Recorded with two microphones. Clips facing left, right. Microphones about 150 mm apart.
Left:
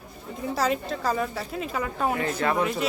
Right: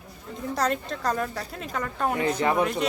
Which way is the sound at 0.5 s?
5° left (ahead or behind).